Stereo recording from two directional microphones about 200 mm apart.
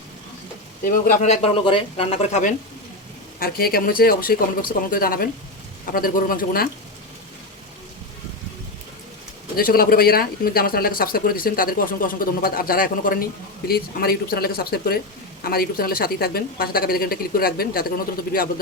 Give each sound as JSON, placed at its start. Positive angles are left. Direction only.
{"t": 0.9, "sound": "speech", "side_deg": 40}
{"t": 9.6, "sound": "speech", "side_deg": 45}